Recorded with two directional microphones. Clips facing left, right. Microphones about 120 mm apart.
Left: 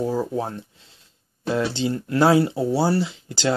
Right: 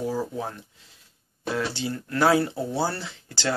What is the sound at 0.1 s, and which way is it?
Speech, 20° left (ahead or behind).